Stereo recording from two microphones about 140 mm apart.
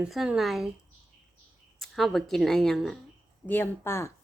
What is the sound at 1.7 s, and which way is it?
Speech, centre (ahead or behind).